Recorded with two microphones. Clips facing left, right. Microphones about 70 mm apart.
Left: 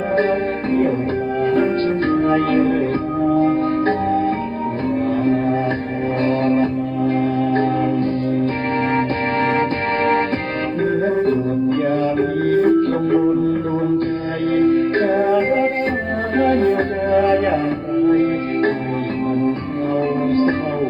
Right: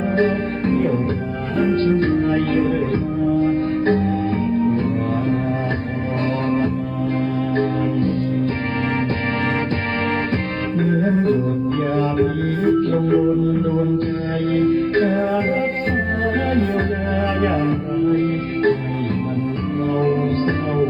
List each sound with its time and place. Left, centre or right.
1.5 s music: left
12.6 s music: left
14.4 s music: left
19.9 s music: left